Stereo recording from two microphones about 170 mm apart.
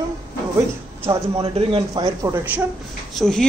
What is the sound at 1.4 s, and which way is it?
Speech, 25° right (ahead or behind).